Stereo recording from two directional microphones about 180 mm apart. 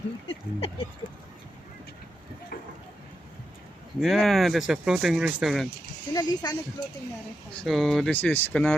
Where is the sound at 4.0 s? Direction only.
Centre (ahead or behind).